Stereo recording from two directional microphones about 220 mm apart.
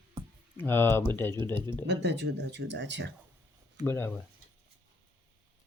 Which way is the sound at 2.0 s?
50° right (ahead or behind).